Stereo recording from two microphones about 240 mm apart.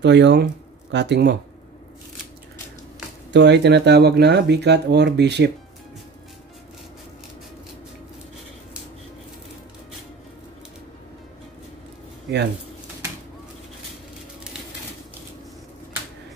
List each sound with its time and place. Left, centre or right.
0.0 s speech: right
3.3 s speech: right